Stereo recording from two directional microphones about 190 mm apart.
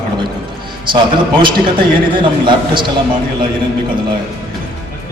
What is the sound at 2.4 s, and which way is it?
Speech, 25° right (ahead or behind).